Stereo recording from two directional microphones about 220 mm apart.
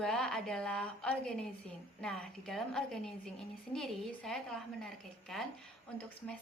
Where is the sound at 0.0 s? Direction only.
5° left (ahead or behind).